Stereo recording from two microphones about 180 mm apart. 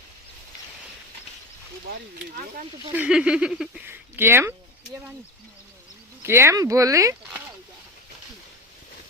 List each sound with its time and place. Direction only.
2.9 s speech: 5° right (ahead or behind)
6.2 s speech: 15° right (ahead or behind)